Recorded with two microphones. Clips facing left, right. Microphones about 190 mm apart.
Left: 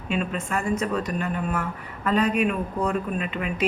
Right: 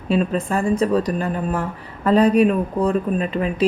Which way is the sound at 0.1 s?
35° right (ahead or behind).